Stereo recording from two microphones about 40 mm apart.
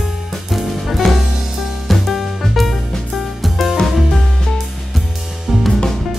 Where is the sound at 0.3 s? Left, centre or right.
Centre.